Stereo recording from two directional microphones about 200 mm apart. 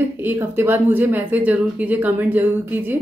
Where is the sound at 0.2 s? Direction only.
10° right (ahead or behind).